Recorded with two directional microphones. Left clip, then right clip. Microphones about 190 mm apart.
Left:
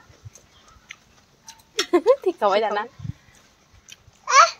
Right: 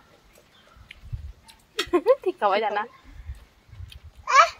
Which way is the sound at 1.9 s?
35° left (ahead or behind).